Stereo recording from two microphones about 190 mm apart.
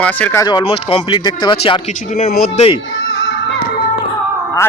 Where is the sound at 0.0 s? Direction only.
5° left (ahead or behind).